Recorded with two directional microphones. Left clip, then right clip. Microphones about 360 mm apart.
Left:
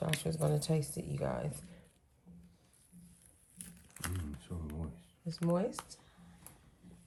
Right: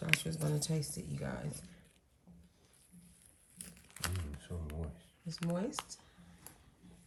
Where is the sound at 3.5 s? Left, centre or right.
Centre.